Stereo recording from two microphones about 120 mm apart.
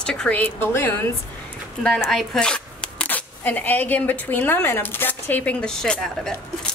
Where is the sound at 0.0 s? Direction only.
10° left (ahead or behind).